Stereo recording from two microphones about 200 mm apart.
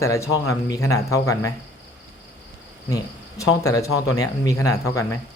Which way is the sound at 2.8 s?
15° left (ahead or behind).